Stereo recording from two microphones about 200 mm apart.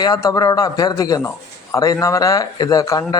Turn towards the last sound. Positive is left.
turn(degrees=15)  # may be behind; listen again after turning